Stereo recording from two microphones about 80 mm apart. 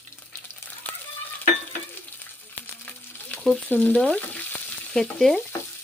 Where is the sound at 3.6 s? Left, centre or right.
Left.